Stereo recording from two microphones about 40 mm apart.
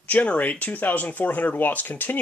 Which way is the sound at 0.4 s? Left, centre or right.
Left.